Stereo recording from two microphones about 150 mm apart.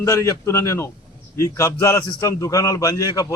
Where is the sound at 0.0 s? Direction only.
20° left (ahead or behind).